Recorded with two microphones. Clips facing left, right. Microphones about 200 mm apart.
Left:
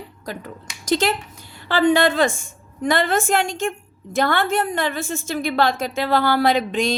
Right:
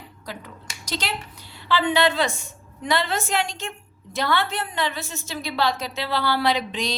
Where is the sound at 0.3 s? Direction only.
50° left (ahead or behind).